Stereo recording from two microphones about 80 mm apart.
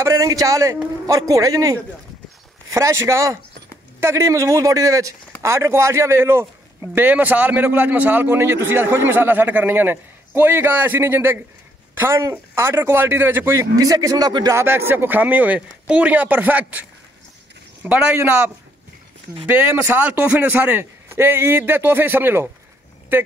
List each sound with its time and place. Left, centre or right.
0.0 s a man's voice: right
13.7 s speech: right
14.5 s speech: right
17.8 s a man's voice: centre
19.4 s speech: right